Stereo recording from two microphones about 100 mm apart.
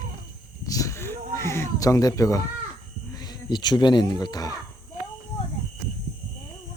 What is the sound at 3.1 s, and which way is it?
Speech, 45° left (ahead or behind).